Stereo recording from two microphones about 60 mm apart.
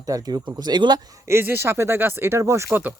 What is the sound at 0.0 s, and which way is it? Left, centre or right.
Speech, right.